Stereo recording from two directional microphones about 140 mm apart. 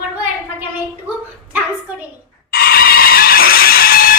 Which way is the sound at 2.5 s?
90° left.